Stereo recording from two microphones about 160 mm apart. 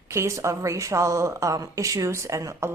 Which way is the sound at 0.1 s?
20° right (ahead or behind).